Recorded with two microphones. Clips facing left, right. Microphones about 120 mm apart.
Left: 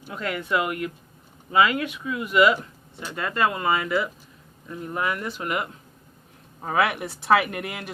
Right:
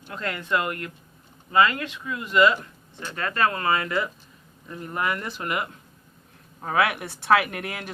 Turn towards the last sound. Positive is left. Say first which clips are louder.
# left 1 dB
turn(degrees=5)  # may be behind; listen again after turning